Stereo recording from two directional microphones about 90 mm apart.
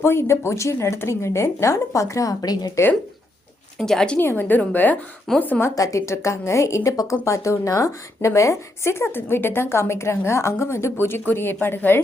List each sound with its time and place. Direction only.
0.0 s a woman's voice: 30° left (ahead or behind); by 2.7 s 45° left (ahead or behind)
3.8 s speech: 5° left (ahead or behind)
4.2 s a woman's voice: 25° left (ahead or behind)
5.7 s a woman's voice: 40° left (ahead or behind); by 12.0 s 20° left (ahead or behind)